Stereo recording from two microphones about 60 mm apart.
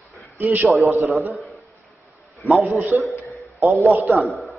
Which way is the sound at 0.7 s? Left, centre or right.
Right.